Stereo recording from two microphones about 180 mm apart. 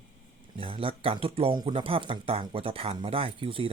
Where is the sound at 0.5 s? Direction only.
30° right (ahead or behind).